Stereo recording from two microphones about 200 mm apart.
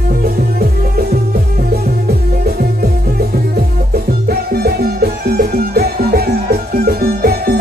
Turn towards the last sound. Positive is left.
turn(degrees=-50)  # may be behind; listen again after turning